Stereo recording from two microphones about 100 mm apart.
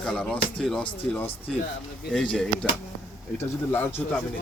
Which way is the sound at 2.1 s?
10° left (ahead or behind).